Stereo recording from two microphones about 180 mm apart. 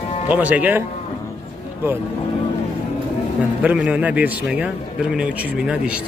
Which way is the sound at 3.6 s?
5° right (ahead or behind).